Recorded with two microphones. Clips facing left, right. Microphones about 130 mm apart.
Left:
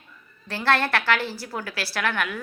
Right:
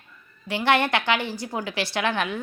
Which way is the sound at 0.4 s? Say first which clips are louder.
Right 2 dB; 15° right (ahead or behind).